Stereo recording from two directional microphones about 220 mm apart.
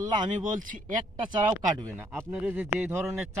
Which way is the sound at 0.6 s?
40° right (ahead or behind).